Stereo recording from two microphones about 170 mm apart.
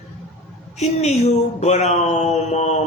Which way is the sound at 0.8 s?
40° left (ahead or behind).